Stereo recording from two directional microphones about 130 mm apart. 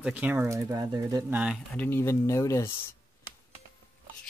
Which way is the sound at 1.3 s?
10° right (ahead or behind).